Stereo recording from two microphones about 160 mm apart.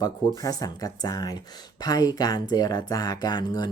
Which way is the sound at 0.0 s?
25° left (ahead or behind).